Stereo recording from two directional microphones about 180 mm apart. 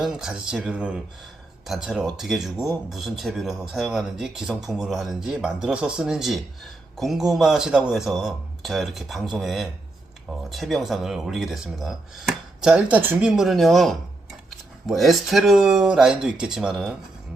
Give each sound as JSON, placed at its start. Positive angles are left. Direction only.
{"t": 0.0, "sound": "speech", "side_deg": -5}